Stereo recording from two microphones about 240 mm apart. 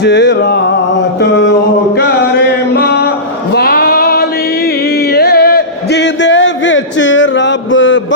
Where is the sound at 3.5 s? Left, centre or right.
Left.